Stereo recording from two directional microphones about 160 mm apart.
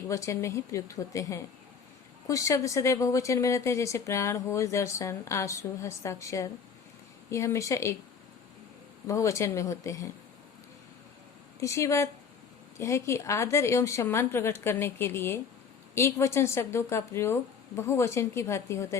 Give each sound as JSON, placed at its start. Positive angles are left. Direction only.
{"t": 0.1, "sound": "a woman's voice", "side_deg": 20}
{"t": 9.0, "sound": "a woman's voice", "side_deg": 20}
{"t": 11.6, "sound": "a woman's voice", "side_deg": 20}